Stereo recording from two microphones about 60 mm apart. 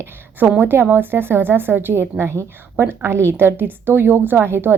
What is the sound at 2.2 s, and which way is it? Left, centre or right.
A woman's voice, right.